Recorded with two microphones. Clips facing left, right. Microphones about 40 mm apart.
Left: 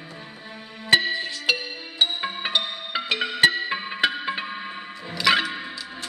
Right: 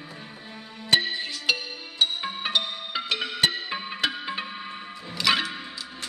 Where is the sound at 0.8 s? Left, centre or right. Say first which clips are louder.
Left 4 dB; centre.